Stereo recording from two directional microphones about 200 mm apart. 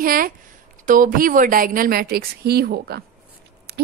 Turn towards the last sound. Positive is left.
turn(degrees=-50)  # may be behind; listen again after turning